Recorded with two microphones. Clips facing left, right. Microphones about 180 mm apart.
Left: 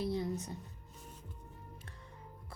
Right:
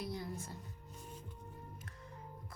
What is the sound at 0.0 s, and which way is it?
Music, 25° left (ahead or behind).